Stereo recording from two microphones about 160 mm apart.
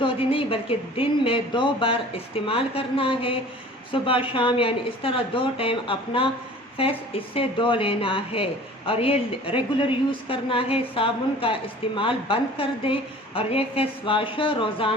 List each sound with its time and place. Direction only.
0.0 s a woman's voice: 35° left (ahead or behind)